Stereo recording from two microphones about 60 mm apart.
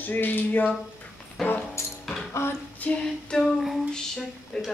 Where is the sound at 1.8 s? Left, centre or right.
Left.